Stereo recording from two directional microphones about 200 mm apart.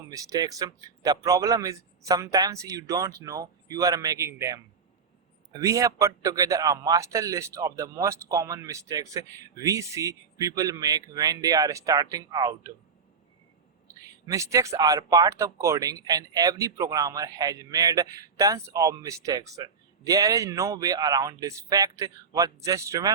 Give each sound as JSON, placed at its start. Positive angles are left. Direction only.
{"t": 0.1, "sound": "speech", "side_deg": -15}
{"t": 14.3, "sound": "speech", "side_deg": -15}